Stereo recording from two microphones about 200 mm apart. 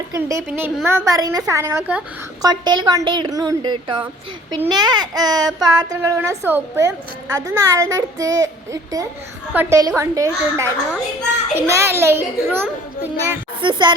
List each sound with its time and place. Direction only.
0.1 s a woman's voice: 15° right (ahead or behind)
13.6 s a woman's voice: 25° right (ahead or behind)